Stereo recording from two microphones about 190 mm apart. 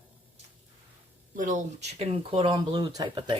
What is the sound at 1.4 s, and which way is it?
Speech, 40° right (ahead or behind).